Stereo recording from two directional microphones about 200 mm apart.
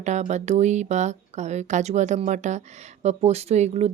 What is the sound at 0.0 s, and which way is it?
Speech, 35° right (ahead or behind).